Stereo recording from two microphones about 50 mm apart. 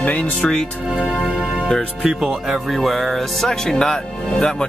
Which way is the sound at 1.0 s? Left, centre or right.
Centre.